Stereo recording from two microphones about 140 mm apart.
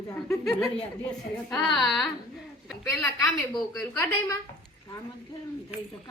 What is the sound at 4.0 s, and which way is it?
Speech, 20° left (ahead or behind).